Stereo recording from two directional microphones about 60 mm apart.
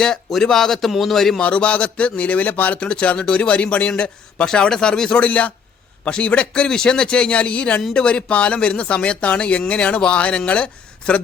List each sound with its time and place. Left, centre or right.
0.0 s a man's voice: centre
1.4 s speech: centre